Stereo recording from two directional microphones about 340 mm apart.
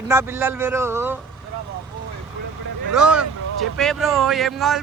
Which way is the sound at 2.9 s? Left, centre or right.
Centre.